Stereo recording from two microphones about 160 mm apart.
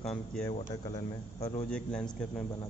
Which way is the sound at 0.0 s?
5° left (ahead or behind).